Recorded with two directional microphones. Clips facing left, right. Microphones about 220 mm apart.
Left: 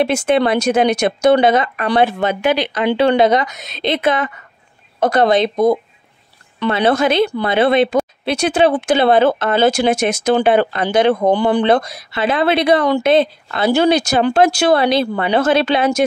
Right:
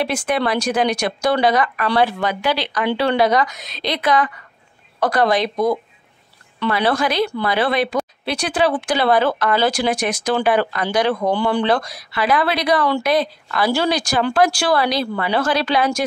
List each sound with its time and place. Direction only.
0.0 s speech: 25° left (ahead or behind)